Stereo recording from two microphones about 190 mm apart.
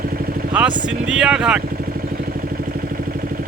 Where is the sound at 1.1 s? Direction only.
5° right (ahead or behind).